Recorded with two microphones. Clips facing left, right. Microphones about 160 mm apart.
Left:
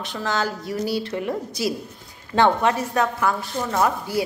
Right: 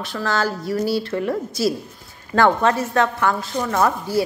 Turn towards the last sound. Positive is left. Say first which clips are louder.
# right 2 dB
turn(degrees=15)  # may be behind; listen again after turning